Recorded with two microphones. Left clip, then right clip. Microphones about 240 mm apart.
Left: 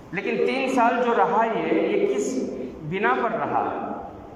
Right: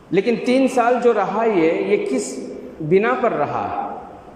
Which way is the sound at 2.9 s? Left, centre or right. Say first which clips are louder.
Right 6 dB; right.